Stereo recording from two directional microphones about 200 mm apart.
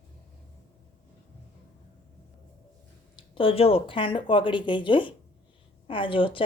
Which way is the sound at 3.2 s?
25° left (ahead or behind).